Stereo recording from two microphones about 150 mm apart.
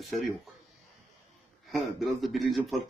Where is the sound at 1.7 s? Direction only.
Centre (ahead or behind).